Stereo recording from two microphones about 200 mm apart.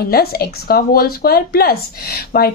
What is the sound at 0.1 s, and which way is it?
Speech, 50° left (ahead or behind).